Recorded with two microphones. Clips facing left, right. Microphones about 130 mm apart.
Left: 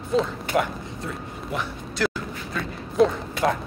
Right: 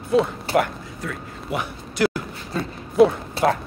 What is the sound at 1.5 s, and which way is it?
Speech, 5° right (ahead or behind).